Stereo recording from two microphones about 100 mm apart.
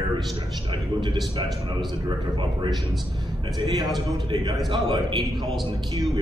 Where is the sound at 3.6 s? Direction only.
45° right (ahead or behind).